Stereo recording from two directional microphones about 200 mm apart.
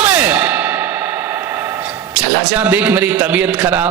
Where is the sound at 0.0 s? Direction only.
5° right (ahead or behind).